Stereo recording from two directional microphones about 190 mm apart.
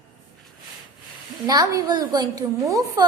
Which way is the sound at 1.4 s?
20° right (ahead or behind).